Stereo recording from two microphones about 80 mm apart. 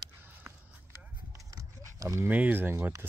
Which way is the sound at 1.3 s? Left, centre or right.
Right.